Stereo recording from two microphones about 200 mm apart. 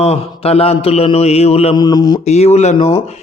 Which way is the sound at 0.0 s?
30° left (ahead or behind).